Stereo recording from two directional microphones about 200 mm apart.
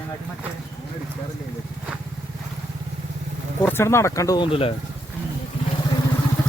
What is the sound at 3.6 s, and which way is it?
Speech, 10° left (ahead or behind).